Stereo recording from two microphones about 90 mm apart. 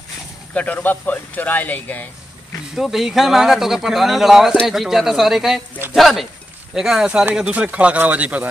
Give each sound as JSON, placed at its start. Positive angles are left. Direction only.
{"t": 0.6, "sound": "speech", "side_deg": 15}
{"t": 2.7, "sound": "speech", "side_deg": -5}